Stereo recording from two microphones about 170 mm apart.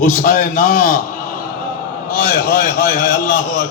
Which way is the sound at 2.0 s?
50° left (ahead or behind).